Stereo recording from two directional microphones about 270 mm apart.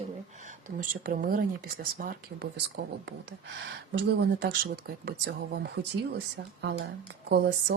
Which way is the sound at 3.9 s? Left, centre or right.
Right.